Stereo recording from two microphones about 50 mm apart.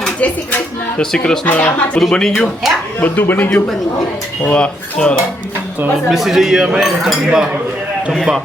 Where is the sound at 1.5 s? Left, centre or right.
Left.